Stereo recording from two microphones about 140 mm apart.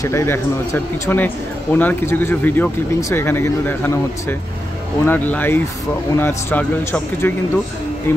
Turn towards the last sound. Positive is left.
turn(degrees=15)  # may be behind; listen again after turning